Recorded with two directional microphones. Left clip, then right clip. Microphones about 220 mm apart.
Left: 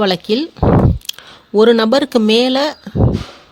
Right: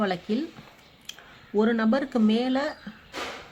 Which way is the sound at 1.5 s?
50° left (ahead or behind).